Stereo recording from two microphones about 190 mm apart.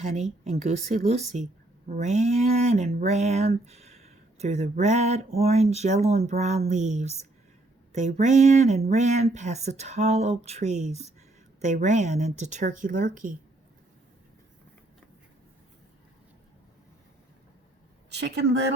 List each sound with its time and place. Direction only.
0.0 s speech: 35° right (ahead or behind)
18.1 s a woman's voice: 60° right (ahead or behind)